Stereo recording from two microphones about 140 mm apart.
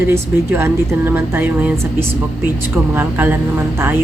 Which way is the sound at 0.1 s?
20° right (ahead or behind).